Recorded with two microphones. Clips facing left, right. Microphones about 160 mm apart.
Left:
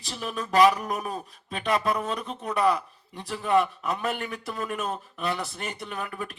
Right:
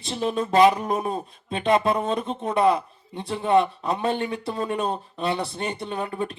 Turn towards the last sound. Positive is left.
turn(degrees=-30)  # may be behind; listen again after turning